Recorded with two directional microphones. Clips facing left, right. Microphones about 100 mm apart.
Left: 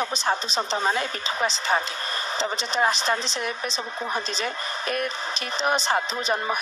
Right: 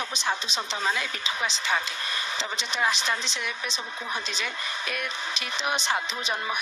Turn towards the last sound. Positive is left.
turn(degrees=40)  # may be behind; listen again after turning